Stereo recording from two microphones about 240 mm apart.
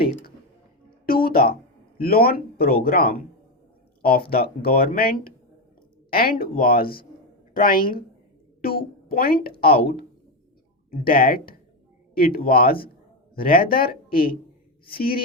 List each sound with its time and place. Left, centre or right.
0.0 s a woman's voice: left